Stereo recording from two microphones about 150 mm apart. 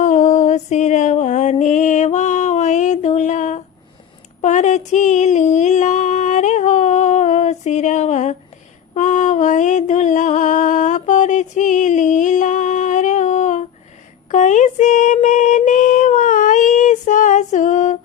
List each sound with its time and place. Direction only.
0.0 s music: 55° left (ahead or behind)
4.4 s a sound: 50° left (ahead or behind)
9.0 s mantra: 55° left (ahead or behind)
14.3 s female singing: 55° left (ahead or behind)